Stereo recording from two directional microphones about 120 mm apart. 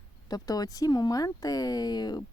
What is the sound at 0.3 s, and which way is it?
A woman's voice, 30° left (ahead or behind).